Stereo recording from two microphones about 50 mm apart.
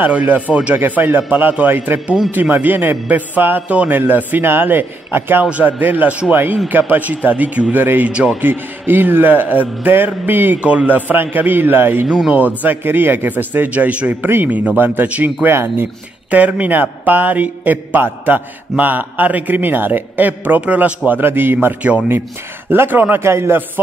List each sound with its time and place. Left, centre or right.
0.0 s a man's voice: right
3.9 s a man's voice: right
5.4 s a man's voice: right
6.9 s a man's voice: right
10.6 s a man's voice: right
10.9 s a man's voice: right
12.3 s a man's voice: right
15.4 s a man's voice: right
16.3 s a man's voice: right
21.2 s a man's voice: right
23.2 s a man's voice: right